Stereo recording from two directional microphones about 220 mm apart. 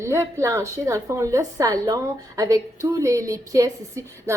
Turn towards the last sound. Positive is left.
turn(degrees=-15)  # may be behind; listen again after turning